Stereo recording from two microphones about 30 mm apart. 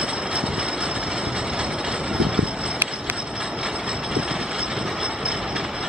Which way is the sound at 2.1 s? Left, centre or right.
Right.